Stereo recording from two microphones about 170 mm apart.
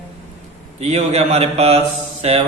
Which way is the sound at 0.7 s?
40° right (ahead or behind).